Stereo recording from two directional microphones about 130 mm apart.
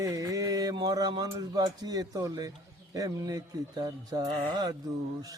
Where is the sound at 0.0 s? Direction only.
25° right (ahead or behind).